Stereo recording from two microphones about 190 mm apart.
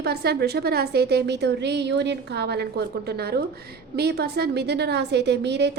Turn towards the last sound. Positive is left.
turn(degrees=-60)  # may be behind; listen again after turning